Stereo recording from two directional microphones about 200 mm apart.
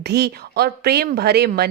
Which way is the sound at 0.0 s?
55° right (ahead or behind).